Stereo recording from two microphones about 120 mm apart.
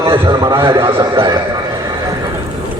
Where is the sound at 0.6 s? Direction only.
50° right (ahead or behind).